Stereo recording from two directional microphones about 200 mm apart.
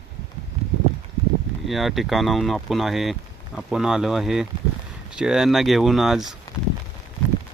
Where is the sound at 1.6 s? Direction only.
Centre (ahead or behind).